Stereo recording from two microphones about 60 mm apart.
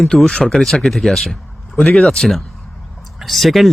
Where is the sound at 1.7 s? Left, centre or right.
Left.